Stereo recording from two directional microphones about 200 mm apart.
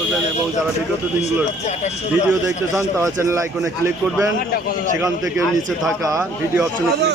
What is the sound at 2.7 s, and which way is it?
Speech, 15° right (ahead or behind).